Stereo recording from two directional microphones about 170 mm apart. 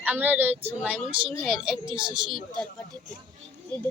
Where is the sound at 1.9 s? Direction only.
25° right (ahead or behind).